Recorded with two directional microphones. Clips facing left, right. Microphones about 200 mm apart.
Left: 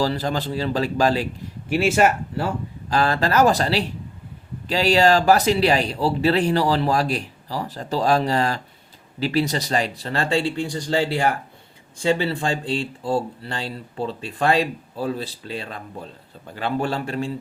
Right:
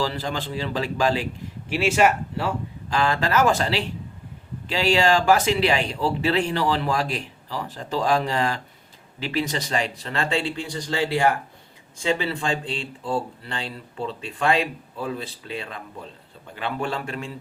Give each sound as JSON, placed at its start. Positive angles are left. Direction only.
{"t": 0.0, "sound": "speech", "side_deg": 40}